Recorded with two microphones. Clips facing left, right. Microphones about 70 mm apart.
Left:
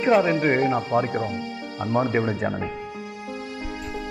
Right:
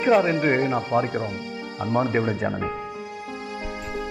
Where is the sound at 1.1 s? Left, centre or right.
Left.